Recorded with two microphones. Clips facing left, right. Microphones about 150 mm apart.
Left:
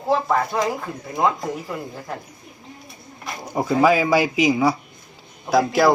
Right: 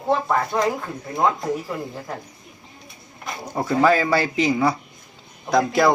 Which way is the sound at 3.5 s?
10° left (ahead or behind).